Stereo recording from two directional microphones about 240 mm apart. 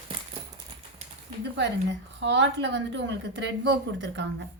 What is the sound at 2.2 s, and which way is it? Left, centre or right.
A woman's voice, right.